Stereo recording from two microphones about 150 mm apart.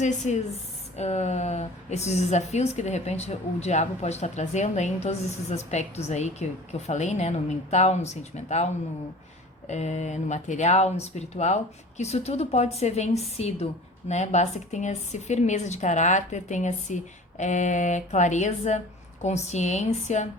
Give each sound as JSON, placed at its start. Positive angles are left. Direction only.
{"t": 0.0, "sound": "a woman's voice", "side_deg": 50}